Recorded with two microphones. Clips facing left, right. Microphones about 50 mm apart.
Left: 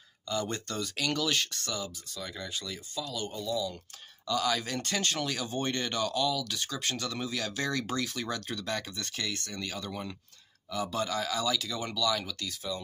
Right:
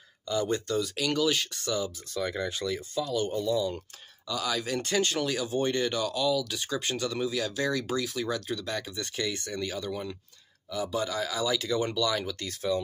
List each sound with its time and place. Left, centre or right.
0.3 s speech: centre
2.1 s speech: right
4.3 s speech: centre
7.2 s speech: centre
9.8 s speech: centre
11.5 s speech: right